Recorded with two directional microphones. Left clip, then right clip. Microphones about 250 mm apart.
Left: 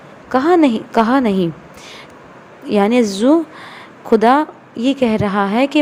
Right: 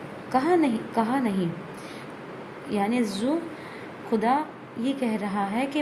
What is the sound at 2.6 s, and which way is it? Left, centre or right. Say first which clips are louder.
A woman's voice: left 13 dB; left.